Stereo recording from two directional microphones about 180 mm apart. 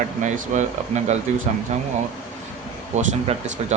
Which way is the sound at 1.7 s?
40° right (ahead or behind).